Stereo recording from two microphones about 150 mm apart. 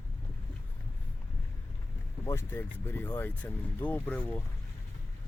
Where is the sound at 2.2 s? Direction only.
15° left (ahead or behind).